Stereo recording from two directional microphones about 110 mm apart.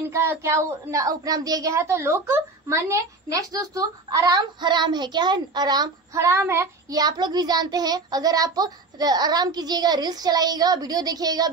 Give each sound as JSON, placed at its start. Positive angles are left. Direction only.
{"t": 0.1, "sound": "a woman's voice", "side_deg": -25}
{"t": 6.1, "sound": "child singing", "side_deg": -20}
{"t": 6.9, "sound": "a woman's voice", "side_deg": -35}